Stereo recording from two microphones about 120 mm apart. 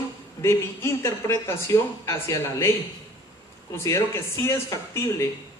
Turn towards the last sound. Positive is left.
turn(degrees=25)  # may be behind; listen again after turning